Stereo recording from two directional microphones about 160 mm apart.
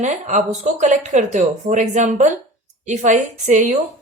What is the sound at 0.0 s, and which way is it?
A woman's voice, 45° right (ahead or behind).